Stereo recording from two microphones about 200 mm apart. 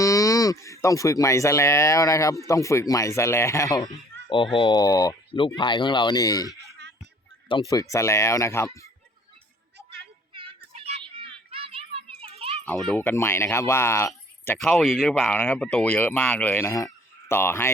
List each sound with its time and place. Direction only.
0.0 s speech: 15° left (ahead or behind)
7.7 s speech: 15° left (ahead or behind)
10.7 s children playing: 30° right (ahead or behind)
12.6 s speech: 5° left (ahead or behind)